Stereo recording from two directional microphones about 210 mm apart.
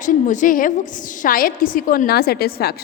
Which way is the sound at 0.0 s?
35° left (ahead or behind).